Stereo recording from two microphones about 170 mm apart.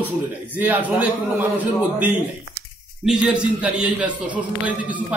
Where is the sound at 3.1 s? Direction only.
5° right (ahead or behind).